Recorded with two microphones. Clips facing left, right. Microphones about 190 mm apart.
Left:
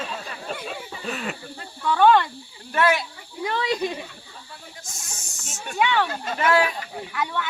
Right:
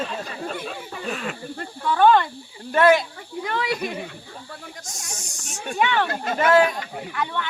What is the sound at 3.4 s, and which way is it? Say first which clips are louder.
Snake: left 1 dB; 20° left (ahead or behind).